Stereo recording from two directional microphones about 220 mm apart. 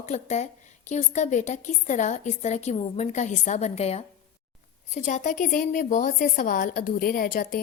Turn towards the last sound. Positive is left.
turn(degrees=40)  # may be behind; listen again after turning